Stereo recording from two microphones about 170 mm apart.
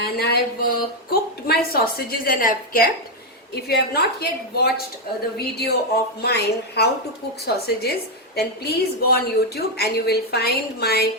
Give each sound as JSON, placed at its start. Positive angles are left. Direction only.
{"t": 0.0, "sound": "a woman's voice", "side_deg": 65}
{"t": 3.5, "sound": "a woman's voice", "side_deg": 70}